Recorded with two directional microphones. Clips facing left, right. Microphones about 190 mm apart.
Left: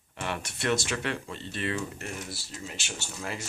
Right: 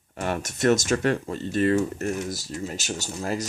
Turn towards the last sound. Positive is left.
turn(degrees=-40)  # may be behind; listen again after turning